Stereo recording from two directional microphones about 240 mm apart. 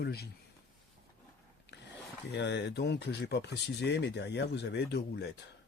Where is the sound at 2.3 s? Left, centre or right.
Left.